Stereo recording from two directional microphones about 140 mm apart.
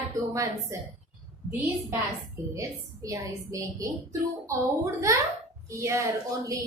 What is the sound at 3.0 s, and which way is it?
Speech, 25° right (ahead or behind).